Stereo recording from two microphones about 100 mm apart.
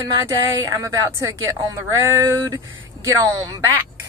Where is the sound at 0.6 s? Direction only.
35° right (ahead or behind).